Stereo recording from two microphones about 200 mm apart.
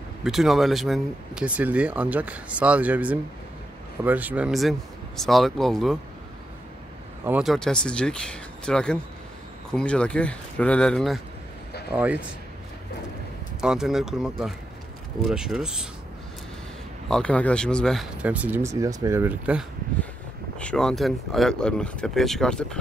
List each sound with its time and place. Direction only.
0.2 s speech: centre (ahead or behind)
7.2 s speech: 5° right (ahead or behind)
13.6 s speech: centre (ahead or behind)
17.1 s speech: 5° left (ahead or behind)
20.5 s speech: 5° left (ahead or behind)